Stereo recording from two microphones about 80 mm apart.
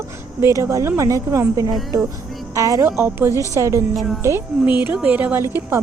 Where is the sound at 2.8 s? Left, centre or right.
Right.